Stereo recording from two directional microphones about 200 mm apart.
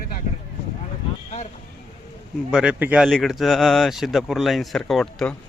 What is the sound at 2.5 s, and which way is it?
Speech, 5° right (ahead or behind).